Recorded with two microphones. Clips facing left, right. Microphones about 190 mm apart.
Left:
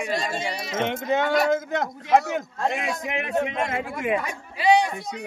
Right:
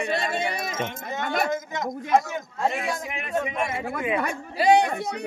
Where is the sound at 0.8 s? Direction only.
75° left (ahead or behind).